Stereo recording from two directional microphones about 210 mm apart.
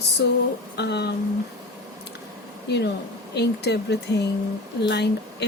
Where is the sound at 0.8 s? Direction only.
55° left (ahead or behind).